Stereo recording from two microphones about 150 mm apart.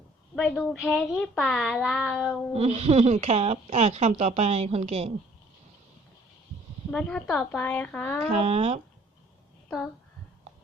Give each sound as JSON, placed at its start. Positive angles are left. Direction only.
{"t": 0.3, "sound": "child singing", "side_deg": 0}
{"t": 2.6, "sound": "speech", "side_deg": -45}
{"t": 6.9, "sound": "a woman's voice", "side_deg": 5}
{"t": 8.3, "sound": "speech", "side_deg": -45}
{"t": 9.6, "sound": "speech", "side_deg": 10}